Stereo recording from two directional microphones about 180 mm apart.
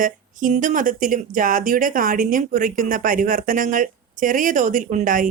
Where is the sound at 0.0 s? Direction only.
45° right (ahead or behind).